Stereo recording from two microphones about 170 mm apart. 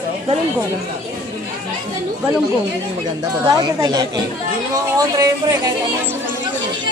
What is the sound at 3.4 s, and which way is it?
Speech, 25° right (ahead or behind).